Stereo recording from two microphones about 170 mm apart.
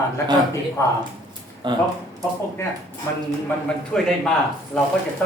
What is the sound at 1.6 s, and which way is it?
Speech, 30° right (ahead or behind).